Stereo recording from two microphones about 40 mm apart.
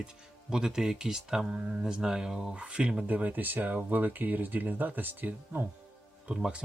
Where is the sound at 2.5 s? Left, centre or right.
Right.